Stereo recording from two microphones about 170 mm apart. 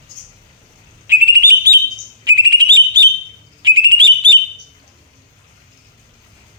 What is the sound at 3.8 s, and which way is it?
Alarm, 25° right (ahead or behind).